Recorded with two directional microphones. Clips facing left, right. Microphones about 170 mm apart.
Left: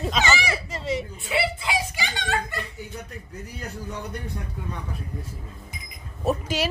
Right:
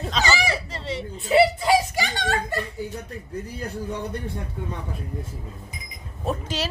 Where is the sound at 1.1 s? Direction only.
35° right (ahead or behind).